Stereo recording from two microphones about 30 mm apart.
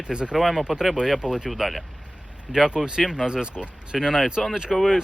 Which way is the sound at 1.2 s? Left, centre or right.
Right.